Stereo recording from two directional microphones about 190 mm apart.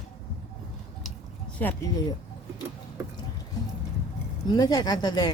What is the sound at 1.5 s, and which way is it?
Speech, 15° left (ahead or behind).